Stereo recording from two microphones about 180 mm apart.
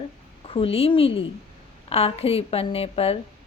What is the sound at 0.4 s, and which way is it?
A woman's voice, 30° left (ahead or behind).